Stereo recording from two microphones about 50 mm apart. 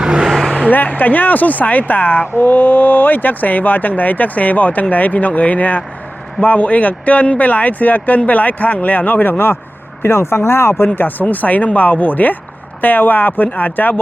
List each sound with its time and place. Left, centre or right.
0.0 s vehicle: centre
0.7 s speech: left
10.0 s speech: left
10.8 s speech: left